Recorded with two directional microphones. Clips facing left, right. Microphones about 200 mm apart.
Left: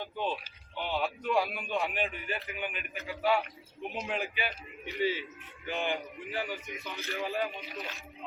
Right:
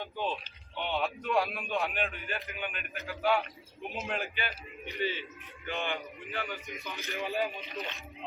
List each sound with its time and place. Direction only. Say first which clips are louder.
0.0 s a sound: even; centre (ahead or behind)
0.8 s a man's voice: even; centre (ahead or behind)
5.6 s a man's voice: left 2 dB; 15° left (ahead or behind)
6.5 s a man's voice: left 1 dB; centre (ahead or behind)
6.9 s a man's voice: left 2 dB; 15° right (ahead or behind)
7.2 s a man's voice: right 1 dB; centre (ahead or behind)